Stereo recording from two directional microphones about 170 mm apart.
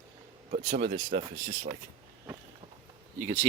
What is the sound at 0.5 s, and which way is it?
Speech, 55° right (ahead or behind).